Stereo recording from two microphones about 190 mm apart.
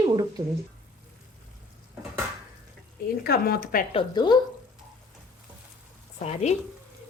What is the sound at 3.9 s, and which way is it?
Speech, 25° left (ahead or behind).